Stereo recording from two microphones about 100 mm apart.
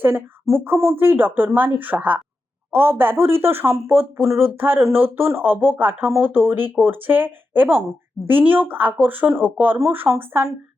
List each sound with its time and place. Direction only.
0.0 s speech: 20° right (ahead or behind)